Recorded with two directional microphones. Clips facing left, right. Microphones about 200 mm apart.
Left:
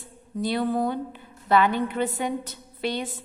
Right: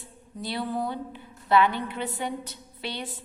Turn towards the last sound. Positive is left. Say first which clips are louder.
# left 7 dB
turn(degrees=45)  # may be behind; listen again after turning